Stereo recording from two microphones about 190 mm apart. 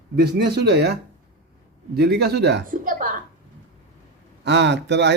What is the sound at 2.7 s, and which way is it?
Speech, 45° right (ahead or behind).